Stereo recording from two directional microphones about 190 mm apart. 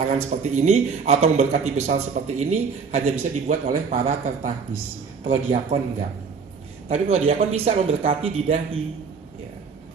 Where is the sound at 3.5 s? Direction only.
40° right (ahead or behind).